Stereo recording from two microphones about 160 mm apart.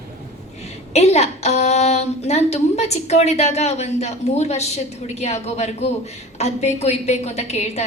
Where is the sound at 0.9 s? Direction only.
45° left (ahead or behind).